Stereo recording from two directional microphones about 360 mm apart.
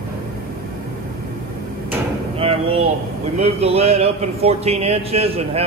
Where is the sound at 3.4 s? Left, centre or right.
Centre.